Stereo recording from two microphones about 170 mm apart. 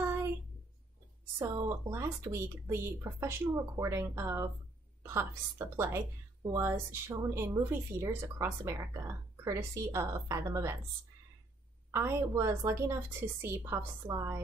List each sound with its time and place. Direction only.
0.0 s a sound: 15° right (ahead or behind)
1.4 s a woman's voice: 20° right (ahead or behind)
11.9 s a woman's voice: 15° right (ahead or behind)